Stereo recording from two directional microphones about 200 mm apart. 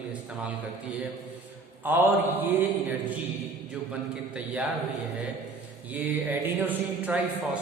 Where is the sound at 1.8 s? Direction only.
10° right (ahead or behind).